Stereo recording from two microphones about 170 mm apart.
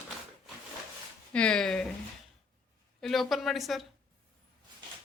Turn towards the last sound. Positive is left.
turn(degrees=0)  # may be behind; listen again after turning